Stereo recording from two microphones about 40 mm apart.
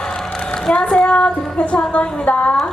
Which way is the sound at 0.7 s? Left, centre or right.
Left.